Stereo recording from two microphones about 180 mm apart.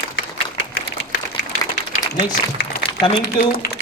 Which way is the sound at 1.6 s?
20° left (ahead or behind).